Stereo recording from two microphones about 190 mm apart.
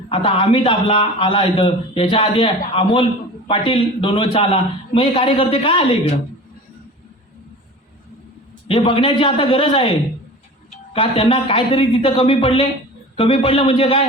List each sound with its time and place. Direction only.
0.1 s a man's voice: 25° left (ahead or behind)
8.6 s a man's voice: 30° left (ahead or behind)